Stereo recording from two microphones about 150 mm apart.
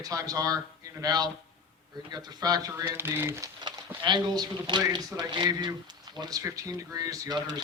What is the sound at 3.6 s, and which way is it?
Speech, 30° right (ahead or behind).